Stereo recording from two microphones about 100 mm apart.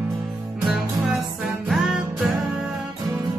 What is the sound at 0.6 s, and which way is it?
Music, centre (ahead or behind).